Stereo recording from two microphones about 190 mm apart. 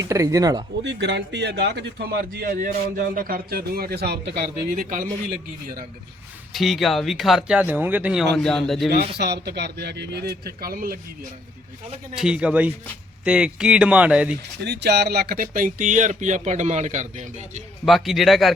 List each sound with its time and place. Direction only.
0.0 s speech: 15° right (ahead or behind)
0.9 s speech: 65° right (ahead or behind); by 5.1 s 45° right (ahead or behind)
6.5 s speech: centre (ahead or behind)
8.9 s a man's voice: 55° right (ahead or behind)
12.1 s speech: 5° right (ahead or behind)
14.6 s speech: 60° right (ahead or behind); by 17.6 s 40° right (ahead or behind)
17.8 s speech: centre (ahead or behind)